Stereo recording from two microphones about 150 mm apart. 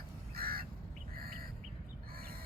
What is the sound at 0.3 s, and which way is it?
Crow, 90° right.